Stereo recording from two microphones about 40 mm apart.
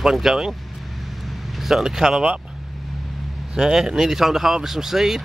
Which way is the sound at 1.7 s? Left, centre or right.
Centre.